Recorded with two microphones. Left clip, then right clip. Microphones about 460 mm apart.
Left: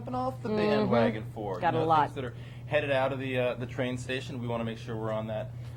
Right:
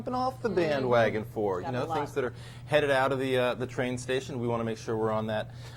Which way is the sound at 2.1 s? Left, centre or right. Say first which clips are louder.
Right 7 dB; right.